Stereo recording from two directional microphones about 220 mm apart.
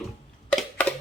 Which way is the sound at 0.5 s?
5° left (ahead or behind).